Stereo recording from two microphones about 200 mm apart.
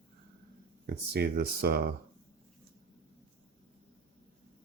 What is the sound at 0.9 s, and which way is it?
Speech, 55° right (ahead or behind).